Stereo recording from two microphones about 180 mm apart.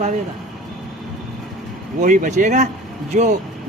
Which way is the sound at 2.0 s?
45° right (ahead or behind).